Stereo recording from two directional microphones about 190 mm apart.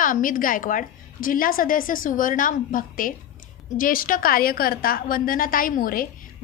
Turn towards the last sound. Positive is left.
turn(degrees=50)  # may be behind; listen again after turning